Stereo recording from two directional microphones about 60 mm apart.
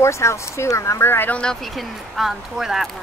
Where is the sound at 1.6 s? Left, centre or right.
Centre.